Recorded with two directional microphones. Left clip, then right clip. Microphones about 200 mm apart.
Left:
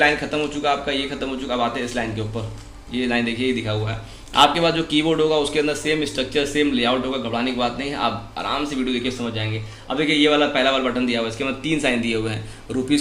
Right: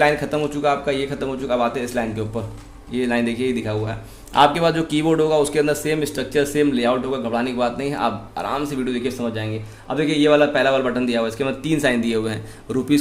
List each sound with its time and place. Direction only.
0.0 s a man's voice: 60° right (ahead or behind)